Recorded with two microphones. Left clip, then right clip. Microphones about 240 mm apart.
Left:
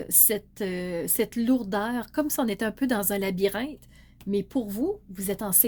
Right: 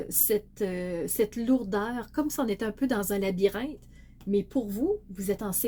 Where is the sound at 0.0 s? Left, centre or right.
Left.